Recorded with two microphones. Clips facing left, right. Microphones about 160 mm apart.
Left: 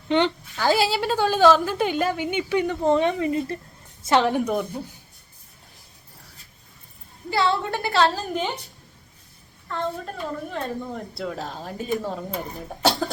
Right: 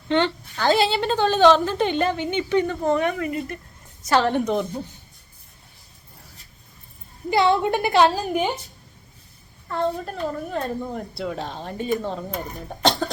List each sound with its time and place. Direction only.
0.1 s a woman's voice: 10° left (ahead or behind)
2.8 s a woman's voice: 25° left (ahead or behind)
4.3 s a woman's voice: 10° left (ahead or behind)
7.3 s a woman's voice: 20° right (ahead or behind)
10.5 s speech: 5° right (ahead or behind)